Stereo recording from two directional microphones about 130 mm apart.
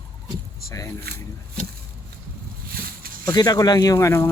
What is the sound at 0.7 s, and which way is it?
Speech, 20° left (ahead or behind).